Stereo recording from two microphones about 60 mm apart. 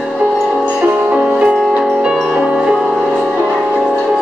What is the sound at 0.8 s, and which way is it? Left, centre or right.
Music, centre.